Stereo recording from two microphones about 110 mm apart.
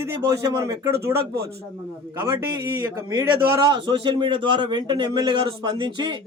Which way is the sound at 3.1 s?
45° right (ahead or behind).